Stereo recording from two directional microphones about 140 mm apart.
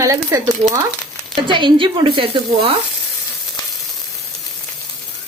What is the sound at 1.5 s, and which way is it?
Speech, 35° right (ahead or behind).